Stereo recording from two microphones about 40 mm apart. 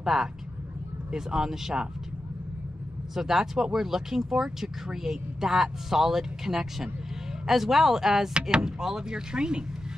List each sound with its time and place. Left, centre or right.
0.0 s speech: centre
3.2 s speech: centre
8.3 s speech: right
8.7 s speech: centre